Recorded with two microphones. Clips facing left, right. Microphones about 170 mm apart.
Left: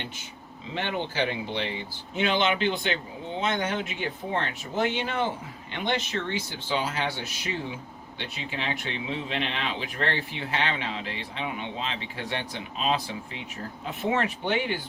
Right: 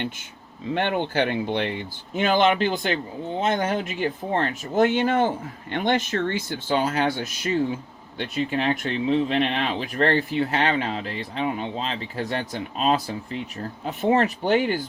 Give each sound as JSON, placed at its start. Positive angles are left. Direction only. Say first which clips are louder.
{"t": 0.7, "sound": "speech", "louder": "right 7 dB", "side_deg": -55}
{"t": 2.2, "sound": "speech", "louder": "right 5 dB", "side_deg": -45}